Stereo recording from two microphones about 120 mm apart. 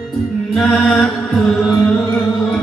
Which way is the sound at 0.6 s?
Centre (ahead or behind).